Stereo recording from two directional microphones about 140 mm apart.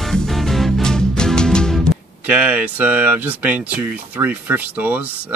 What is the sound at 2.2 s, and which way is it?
Speech, 10° right (ahead or behind).